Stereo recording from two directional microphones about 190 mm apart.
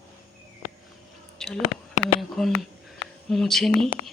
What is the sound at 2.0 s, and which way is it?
Speech, centre (ahead or behind).